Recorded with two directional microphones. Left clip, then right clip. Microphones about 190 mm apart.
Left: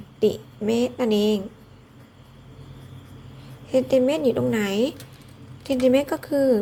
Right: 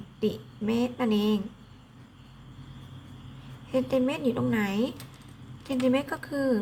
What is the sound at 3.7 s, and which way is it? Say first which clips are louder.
A woman's voice: left 7 dB; 15° left (ahead or behind).